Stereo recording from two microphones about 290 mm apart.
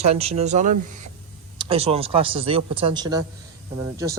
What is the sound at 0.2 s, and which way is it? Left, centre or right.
A man's voice, right.